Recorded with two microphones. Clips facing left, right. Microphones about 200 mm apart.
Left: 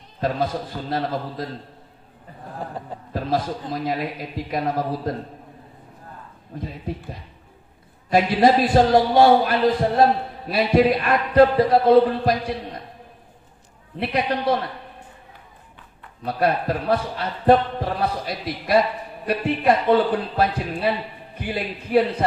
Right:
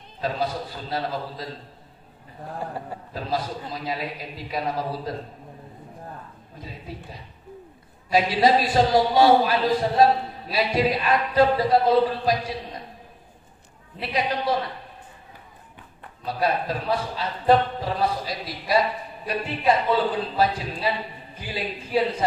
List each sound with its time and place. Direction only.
0.2 s a man's voice: 50° left (ahead or behind)
3.1 s a man's voice: 50° left (ahead or behind)
6.6 s a man's voice: 55° left (ahead or behind)
13.9 s a man's voice: 55° left (ahead or behind)
16.3 s a man's voice: 55° left (ahead or behind)